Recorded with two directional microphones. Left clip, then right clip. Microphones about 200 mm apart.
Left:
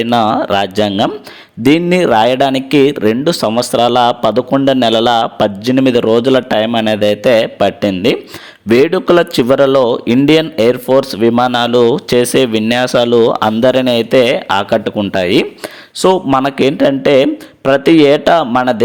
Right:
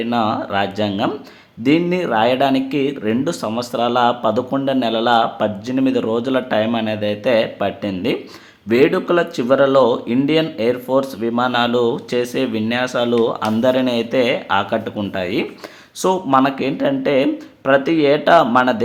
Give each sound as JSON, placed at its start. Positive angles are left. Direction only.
{"t": 0.0, "sound": "speech", "side_deg": 35}